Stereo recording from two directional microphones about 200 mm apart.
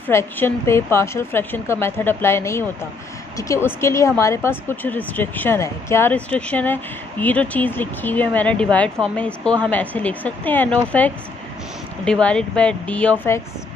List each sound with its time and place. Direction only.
0.0 s speech: 10° left (ahead or behind)